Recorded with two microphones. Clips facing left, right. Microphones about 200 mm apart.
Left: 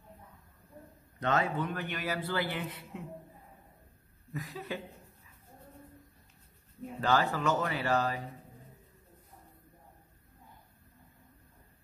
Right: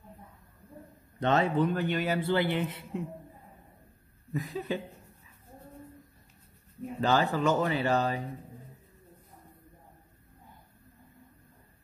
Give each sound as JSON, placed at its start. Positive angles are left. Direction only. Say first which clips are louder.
{"t": 1.2, "sound": "a man's voice", "louder": "right 5 dB", "side_deg": -30}
{"t": 4.3, "sound": "a man's voice", "louder": "right 6 dB", "side_deg": -25}
{"t": 7.0, "sound": "a man's voice", "louder": "right 3 dB", "side_deg": -25}